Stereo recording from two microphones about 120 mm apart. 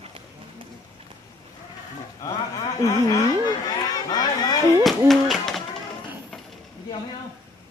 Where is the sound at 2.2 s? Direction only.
30° left (ahead or behind).